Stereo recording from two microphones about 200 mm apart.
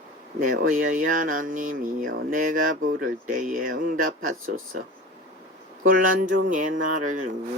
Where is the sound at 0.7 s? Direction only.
40° right (ahead or behind).